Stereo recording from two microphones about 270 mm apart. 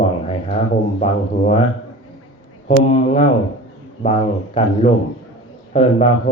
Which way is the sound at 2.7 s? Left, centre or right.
Left.